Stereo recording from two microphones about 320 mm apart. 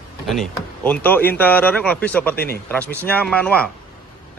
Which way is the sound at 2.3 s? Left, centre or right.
Left.